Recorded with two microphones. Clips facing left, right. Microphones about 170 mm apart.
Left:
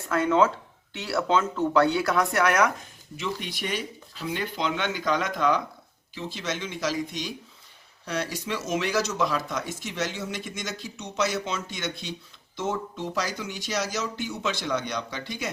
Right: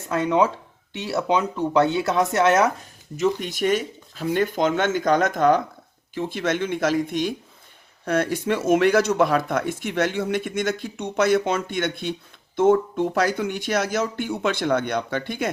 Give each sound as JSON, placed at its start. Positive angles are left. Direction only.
{"t": 0.1, "sound": "speech", "side_deg": -20}
{"t": 3.2, "sound": "speech", "side_deg": -45}